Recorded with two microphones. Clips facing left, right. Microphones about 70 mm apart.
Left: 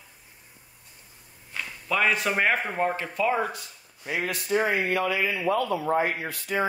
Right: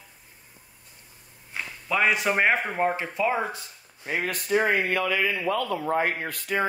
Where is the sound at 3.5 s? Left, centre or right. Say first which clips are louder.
Right 1 dB; right.